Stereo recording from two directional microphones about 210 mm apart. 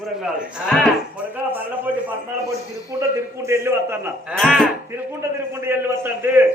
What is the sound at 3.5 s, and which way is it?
Speech, 10° right (ahead or behind).